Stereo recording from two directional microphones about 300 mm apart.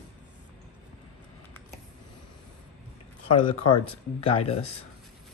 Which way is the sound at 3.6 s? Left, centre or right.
Centre.